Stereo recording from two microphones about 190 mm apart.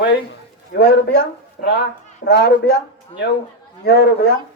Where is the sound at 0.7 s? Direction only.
65° left (ahead or behind).